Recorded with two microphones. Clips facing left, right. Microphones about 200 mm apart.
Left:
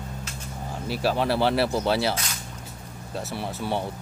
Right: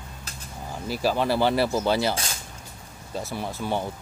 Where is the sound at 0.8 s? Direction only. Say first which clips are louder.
Even; centre (ahead or behind).